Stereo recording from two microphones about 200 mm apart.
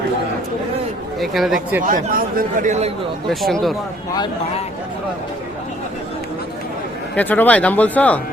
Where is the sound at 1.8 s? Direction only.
45° right (ahead or behind).